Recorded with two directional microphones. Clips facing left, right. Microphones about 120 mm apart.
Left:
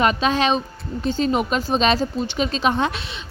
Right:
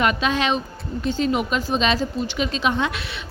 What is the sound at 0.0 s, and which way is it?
A woman's voice, 35° left (ahead or behind).